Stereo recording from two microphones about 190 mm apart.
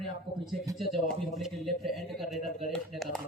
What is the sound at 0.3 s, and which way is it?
Speech, 60° right (ahead or behind).